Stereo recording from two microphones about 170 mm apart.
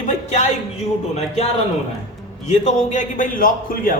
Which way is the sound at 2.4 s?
40° left (ahead or behind).